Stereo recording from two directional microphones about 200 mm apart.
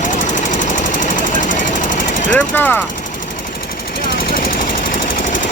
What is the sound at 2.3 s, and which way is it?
Speech, 10° left (ahead or behind).